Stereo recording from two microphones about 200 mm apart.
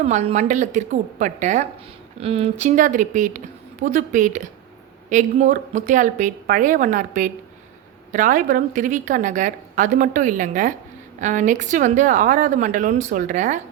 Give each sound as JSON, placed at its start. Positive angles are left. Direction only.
{"t": 0.0, "sound": "a woman's voice", "side_deg": -35}